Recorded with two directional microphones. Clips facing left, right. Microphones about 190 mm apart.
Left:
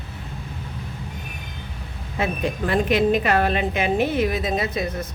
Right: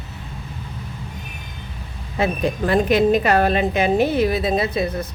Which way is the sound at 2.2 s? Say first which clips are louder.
Right 4 dB; 35° right (ahead or behind).